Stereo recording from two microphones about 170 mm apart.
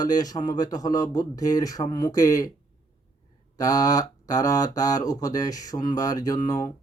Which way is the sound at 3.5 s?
20° left (ahead or behind).